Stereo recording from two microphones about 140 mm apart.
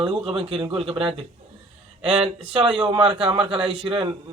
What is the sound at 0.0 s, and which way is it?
A man's voice, 40° right (ahead or behind).